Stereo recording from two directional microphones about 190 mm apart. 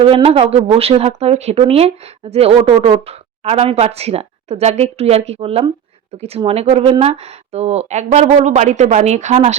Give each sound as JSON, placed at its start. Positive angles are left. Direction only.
{"t": 0.0, "sound": "speech", "side_deg": -30}